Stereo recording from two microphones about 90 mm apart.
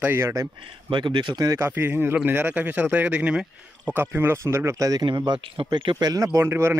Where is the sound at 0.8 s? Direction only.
60° right (ahead or behind).